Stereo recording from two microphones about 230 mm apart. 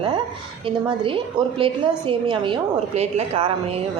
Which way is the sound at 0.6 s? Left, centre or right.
Right.